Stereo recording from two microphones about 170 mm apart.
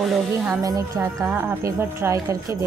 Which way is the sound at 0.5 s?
20° right (ahead or behind).